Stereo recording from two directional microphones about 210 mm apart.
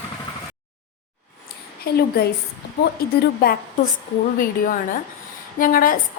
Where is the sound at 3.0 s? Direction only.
45° left (ahead or behind).